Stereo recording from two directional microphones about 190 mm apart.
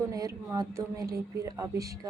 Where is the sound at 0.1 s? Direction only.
15° right (ahead or behind).